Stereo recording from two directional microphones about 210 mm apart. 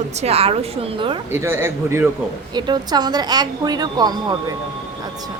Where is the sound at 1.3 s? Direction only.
10° right (ahead or behind).